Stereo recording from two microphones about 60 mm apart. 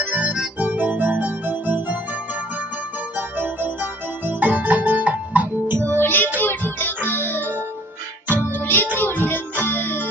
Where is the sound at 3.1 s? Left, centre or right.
Right.